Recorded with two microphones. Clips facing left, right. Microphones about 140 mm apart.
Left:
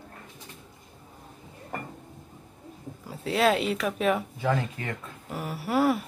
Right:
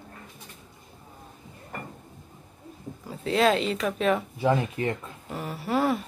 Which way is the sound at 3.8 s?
10° left (ahead or behind).